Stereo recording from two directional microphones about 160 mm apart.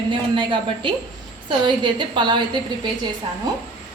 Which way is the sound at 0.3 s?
30° right (ahead or behind).